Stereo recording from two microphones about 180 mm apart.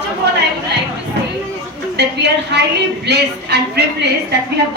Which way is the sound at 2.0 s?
70° right (ahead or behind).